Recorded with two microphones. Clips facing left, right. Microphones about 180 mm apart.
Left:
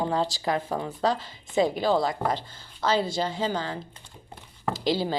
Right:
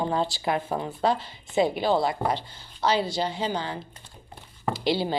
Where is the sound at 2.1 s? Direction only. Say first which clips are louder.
Right 1 dB; 45° left (ahead or behind).